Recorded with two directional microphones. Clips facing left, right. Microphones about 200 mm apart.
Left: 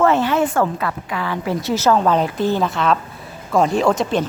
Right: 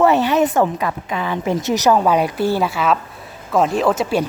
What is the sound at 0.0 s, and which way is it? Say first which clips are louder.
A woman's voice: right 2 dB; 15° right (ahead or behind).